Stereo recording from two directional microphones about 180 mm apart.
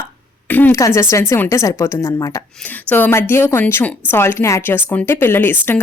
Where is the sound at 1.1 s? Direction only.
15° left (ahead or behind).